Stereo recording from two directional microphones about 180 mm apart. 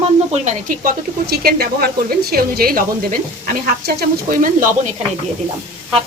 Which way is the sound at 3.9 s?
55° right (ahead or behind).